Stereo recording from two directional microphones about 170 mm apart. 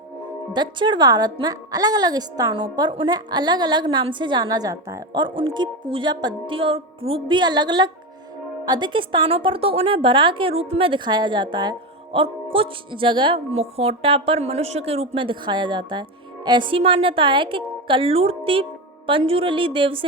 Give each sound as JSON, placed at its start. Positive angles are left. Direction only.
{"t": 0.5, "sound": "a woman's voice", "side_deg": -25}